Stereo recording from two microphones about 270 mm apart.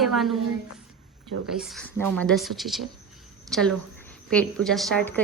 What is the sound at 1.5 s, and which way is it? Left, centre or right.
Speech, centre.